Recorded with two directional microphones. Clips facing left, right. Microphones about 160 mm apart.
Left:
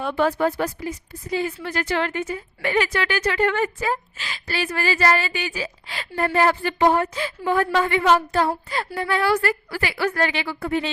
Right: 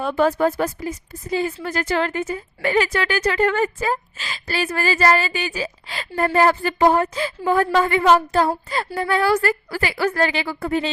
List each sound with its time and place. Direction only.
0.0 s a woman's voice: 40° right (ahead or behind)